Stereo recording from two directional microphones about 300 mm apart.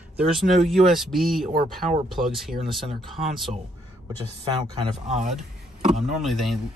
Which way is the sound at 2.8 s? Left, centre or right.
Centre.